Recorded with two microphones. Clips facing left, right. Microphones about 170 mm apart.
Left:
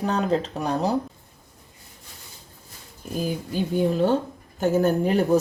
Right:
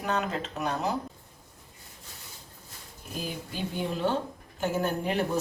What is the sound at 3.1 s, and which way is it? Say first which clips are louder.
Speech: left 9 dB; 45° left (ahead or behind).